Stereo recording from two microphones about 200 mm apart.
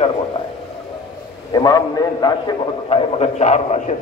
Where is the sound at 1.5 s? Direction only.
20° left (ahead or behind).